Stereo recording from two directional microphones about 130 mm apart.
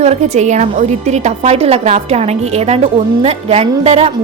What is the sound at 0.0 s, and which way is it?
A woman's voice, 60° right (ahead or behind).